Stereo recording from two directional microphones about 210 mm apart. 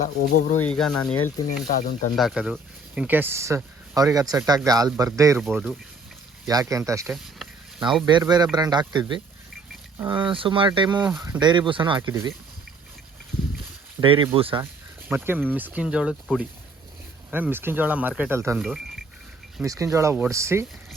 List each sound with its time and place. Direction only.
0.0 s speech: 35° left (ahead or behind)
0.8 s speech: 5° left (ahead or behind)
1.6 s speech: 35° left (ahead or behind)
2.1 s speech: centre (ahead or behind)
5.4 s speech: 5° right (ahead or behind)
6.5 s speech: 15° right (ahead or behind)
14.0 s speech: 25° right (ahead or behind)
14.6 s speech: 10° right (ahead or behind)
18.6 s speech: centre (ahead or behind)
19.6 s speech: 15° right (ahead or behind)